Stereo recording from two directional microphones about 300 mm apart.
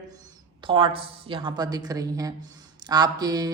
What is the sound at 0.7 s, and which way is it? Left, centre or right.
Speech, centre.